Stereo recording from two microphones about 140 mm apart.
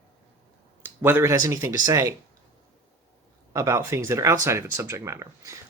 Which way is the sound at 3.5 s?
20° right (ahead or behind).